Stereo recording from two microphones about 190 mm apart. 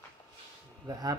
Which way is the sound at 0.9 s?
20° right (ahead or behind).